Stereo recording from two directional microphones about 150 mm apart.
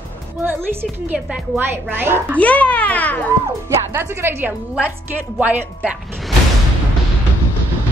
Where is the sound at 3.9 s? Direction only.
15° right (ahead or behind).